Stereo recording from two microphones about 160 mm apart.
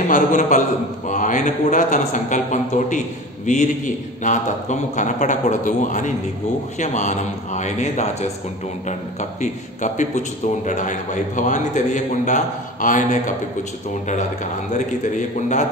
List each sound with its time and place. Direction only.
0.1 s a man's voice: 55° left (ahead or behind)